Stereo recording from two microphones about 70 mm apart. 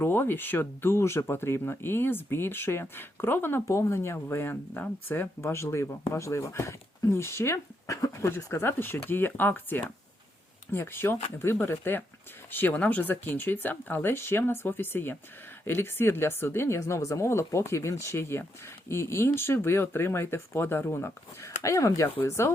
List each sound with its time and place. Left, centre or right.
0.0 s speech: left
5.4 s speech: left
8.5 s speech: left